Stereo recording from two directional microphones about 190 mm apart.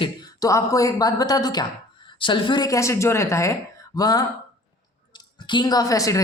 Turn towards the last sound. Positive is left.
turn(degrees=15)  # may be behind; listen again after turning